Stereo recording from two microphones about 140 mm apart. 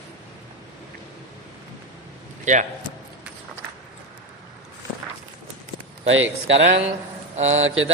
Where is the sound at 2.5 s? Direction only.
60° right (ahead or behind).